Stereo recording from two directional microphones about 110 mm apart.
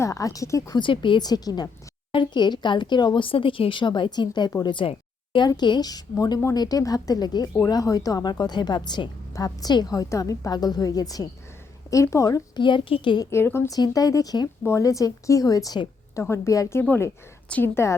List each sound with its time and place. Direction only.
0.0 s a woman's voice: 30° left (ahead or behind)
0.8 s a woman's voice: 50° left (ahead or behind); by 12.6 s 30° left (ahead or behind)
12.6 s speech: 45° left (ahead or behind)
13.3 s speech: 25° left (ahead or behind)
13.7 s a woman's voice: 35° left (ahead or behind)
16.8 s speech: 15° left (ahead or behind)